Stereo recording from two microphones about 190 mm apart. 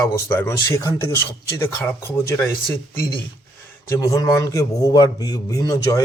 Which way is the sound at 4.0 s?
20° left (ahead or behind).